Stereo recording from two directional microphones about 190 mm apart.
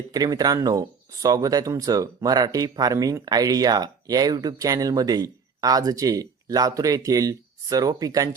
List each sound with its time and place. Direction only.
0.1 s speech: 20° right (ahead or behind)